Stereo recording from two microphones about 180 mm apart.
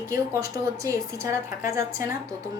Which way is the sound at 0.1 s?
15° right (ahead or behind).